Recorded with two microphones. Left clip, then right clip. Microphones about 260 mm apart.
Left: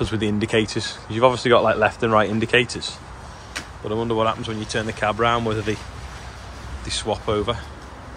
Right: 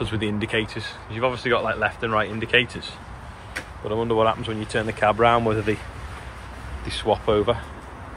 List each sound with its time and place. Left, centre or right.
0.0 s speech: left
3.9 s speech: centre
6.9 s speech: centre